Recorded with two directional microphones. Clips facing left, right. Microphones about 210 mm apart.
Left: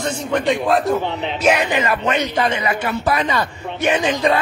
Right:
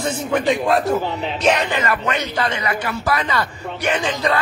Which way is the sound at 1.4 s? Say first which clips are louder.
Left 2 dB; 10° left (ahead or behind).